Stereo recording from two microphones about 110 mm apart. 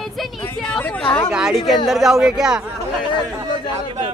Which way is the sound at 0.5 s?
10° left (ahead or behind).